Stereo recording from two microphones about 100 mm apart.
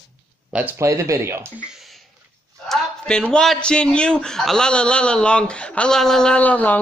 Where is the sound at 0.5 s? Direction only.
10° right (ahead or behind).